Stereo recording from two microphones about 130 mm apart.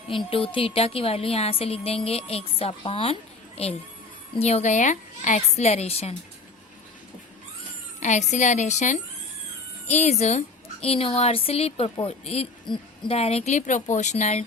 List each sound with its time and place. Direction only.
0.1 s a woman's voice: 45° left (ahead or behind)
8.0 s a woman's voice: 65° left (ahead or behind); by 12.5 s 50° left (ahead or behind)
12.7 s hoot: 35° left (ahead or behind)
13.1 s a woman's voice: 50° left (ahead or behind)